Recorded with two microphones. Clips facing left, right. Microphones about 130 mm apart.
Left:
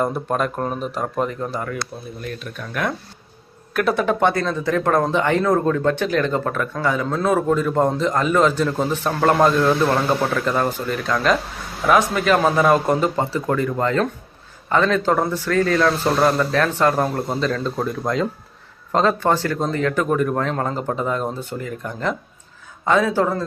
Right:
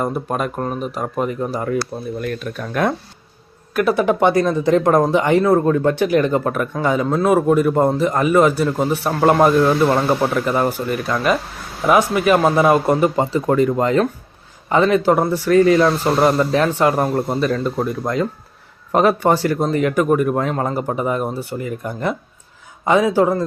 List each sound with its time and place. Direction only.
0.0 s speech: 5° right (ahead or behind)
1.5 s speech: 25° right (ahead or behind)
3.8 s speech: centre (ahead or behind)
4.0 s a man's voice: 15° right (ahead or behind)